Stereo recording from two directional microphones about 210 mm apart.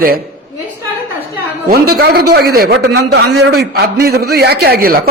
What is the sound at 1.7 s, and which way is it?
A woman's voice, 50° right (ahead or behind).